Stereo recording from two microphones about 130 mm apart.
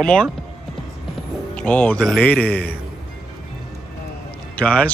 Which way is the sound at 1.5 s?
10° left (ahead or behind).